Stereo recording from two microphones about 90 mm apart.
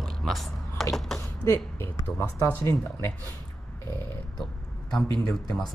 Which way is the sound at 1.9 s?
35° left (ahead or behind).